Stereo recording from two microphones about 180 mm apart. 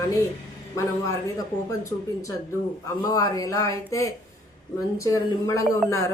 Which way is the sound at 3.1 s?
20° left (ahead or behind).